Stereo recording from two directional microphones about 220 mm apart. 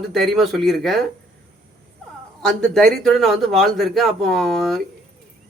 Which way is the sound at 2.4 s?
Centre (ahead or behind).